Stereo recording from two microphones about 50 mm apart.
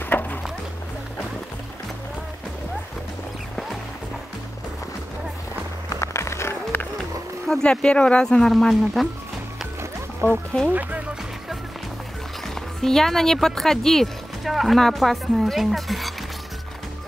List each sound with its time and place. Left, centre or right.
0.0 s a sound: left
5.9 s music: left
6.7 s run: left
7.6 s speech: left; by 9.0 s centre
10.2 s speech: right
10.7 s speech: right
12.4 s speech: centre